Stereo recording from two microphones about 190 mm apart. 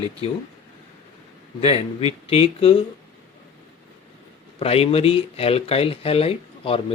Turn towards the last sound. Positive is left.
turn(degrees=30)  # may be behind; listen again after turning